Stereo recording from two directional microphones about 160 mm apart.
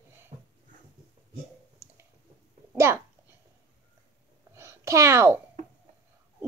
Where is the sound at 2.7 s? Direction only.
15° right (ahead or behind).